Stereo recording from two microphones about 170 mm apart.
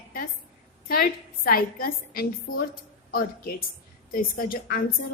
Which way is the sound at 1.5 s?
60° left (ahead or behind).